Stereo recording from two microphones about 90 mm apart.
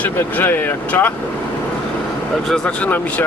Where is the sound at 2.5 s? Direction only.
15° left (ahead or behind).